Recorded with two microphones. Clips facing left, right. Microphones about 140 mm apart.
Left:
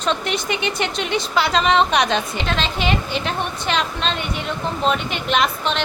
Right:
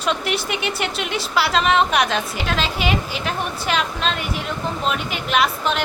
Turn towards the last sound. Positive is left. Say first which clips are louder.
# even
turn(degrees=-5)  # may be behind; listen again after turning